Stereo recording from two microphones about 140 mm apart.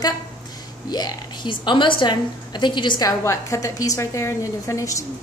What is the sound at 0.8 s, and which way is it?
A woman's voice, 30° left (ahead or behind).